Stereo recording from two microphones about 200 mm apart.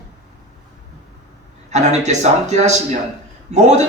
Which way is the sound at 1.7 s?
35° right (ahead or behind).